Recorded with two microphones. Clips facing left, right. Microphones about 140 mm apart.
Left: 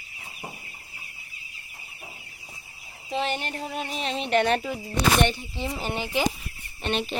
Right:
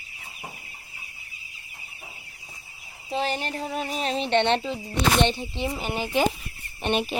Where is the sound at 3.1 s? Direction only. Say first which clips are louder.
Right 1 dB; 35° right (ahead or behind); by 5.7 s 20° right (ahead or behind).